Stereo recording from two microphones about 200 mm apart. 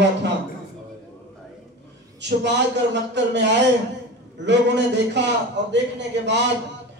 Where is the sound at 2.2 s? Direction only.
60° right (ahead or behind).